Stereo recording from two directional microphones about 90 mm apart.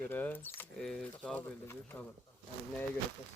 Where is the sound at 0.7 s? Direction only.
5° left (ahead or behind).